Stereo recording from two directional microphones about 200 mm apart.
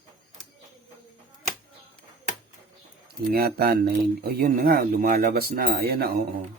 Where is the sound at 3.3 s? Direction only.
50° right (ahead or behind).